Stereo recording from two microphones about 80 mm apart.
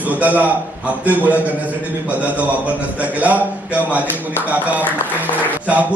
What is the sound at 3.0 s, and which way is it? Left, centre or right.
A man's voice, centre.